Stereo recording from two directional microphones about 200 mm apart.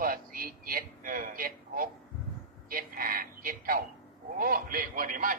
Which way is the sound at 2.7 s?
45° right (ahead or behind).